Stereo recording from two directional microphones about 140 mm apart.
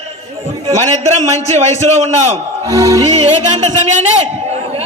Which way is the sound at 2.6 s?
25° right (ahead or behind).